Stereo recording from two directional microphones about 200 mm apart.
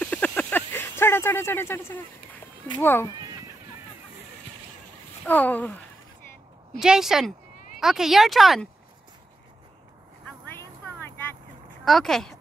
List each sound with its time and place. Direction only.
0.0 s a sound: 5° left (ahead or behind)
2.8 s speech: 10° left (ahead or behind)
5.2 s speech: 10° left (ahead or behind)
6.8 s speech: centre (ahead or behind)
10.5 s a sound: 10° left (ahead or behind)
11.8 s speech: centre (ahead or behind)